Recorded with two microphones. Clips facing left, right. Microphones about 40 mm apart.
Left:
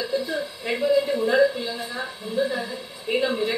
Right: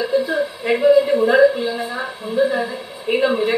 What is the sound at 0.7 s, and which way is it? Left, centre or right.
A woman's voice, right.